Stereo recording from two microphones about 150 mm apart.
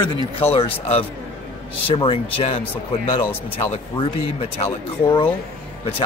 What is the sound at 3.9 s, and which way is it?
Speech, 40° left (ahead or behind).